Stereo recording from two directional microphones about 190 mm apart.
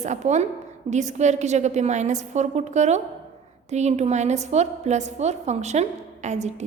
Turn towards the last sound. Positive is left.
turn(degrees=-35)  # may be behind; listen again after turning